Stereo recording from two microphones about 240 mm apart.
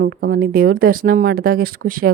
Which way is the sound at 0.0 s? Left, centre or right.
Right.